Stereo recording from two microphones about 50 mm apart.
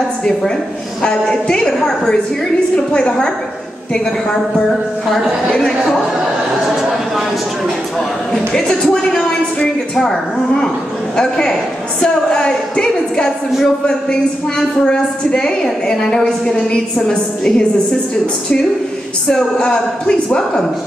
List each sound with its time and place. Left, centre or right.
1.0 s a woman's voice: centre
6.8 s a sound: centre
8.3 s a woman's voice: centre
15.3 s a woman's voice: centre
19.2 s a woman's voice: centre